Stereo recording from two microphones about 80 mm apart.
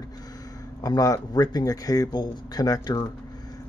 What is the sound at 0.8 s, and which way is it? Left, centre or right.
Speech, left.